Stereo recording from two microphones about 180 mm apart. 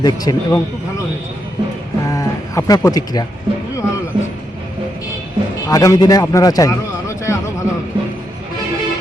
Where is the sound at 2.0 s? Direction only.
20° left (ahead or behind).